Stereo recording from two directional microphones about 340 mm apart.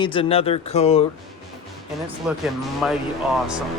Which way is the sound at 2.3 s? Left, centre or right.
Centre.